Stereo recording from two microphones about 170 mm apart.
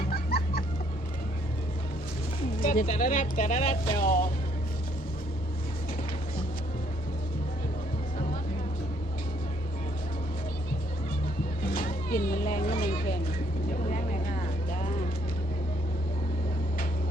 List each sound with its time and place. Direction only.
0.0 s music: 65° left (ahead or behind)
2.6 s speech: 55° left (ahead or behind)
4.0 s speech: 55° left (ahead or behind)
11.6 s music: 60° left (ahead or behind)
12.8 s a sound: 60° left (ahead or behind)
13.8 s vehicle: 50° left (ahead or behind)